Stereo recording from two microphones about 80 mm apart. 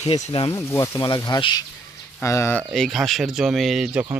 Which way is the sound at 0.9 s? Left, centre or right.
Left.